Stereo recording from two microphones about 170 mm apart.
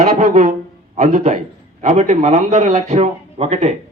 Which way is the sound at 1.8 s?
45° right (ahead or behind).